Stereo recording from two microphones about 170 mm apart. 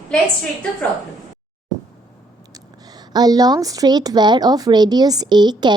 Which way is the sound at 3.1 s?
25° right (ahead or behind).